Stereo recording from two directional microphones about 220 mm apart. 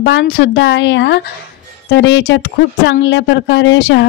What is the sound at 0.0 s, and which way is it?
Speech, 55° left (ahead or behind).